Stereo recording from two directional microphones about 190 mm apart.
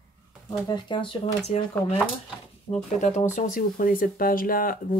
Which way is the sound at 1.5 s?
35° left (ahead or behind).